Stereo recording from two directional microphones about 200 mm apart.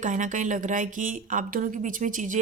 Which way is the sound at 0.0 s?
40° right (ahead or behind).